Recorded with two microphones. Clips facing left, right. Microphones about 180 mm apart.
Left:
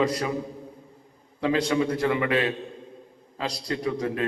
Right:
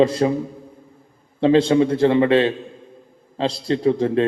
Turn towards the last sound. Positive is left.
turn(degrees=-30)  # may be behind; listen again after turning